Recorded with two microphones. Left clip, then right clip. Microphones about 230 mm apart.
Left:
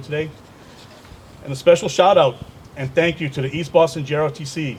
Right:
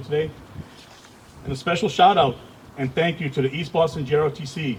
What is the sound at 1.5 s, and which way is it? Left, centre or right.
Speech, left.